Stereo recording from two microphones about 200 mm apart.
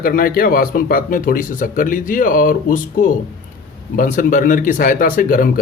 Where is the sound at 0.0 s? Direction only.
45° left (ahead or behind).